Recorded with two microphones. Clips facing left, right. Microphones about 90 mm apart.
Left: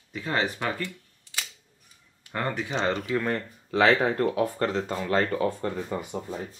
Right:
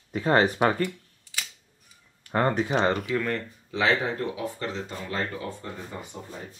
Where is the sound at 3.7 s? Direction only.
50° left (ahead or behind).